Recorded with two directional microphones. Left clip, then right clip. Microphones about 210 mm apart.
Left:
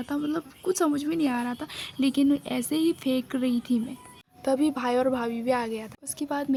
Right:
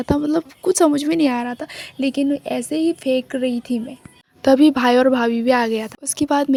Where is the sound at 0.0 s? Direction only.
40° right (ahead or behind).